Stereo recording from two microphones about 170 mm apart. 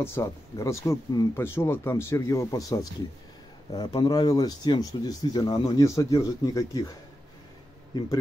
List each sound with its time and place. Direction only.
0.0 s speech: 15° left (ahead or behind)